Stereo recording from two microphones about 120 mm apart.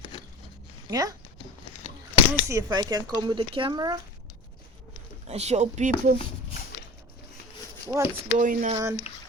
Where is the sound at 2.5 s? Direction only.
30° right (ahead or behind).